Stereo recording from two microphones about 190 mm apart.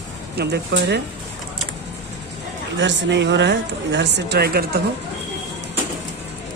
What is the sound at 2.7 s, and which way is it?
Speech, 70° right (ahead or behind).